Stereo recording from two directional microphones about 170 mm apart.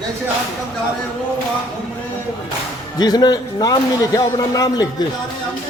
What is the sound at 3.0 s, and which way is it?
Speech, 25° left (ahead or behind).